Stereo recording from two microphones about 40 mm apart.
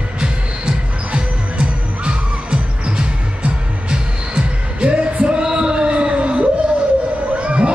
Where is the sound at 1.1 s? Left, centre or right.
Right.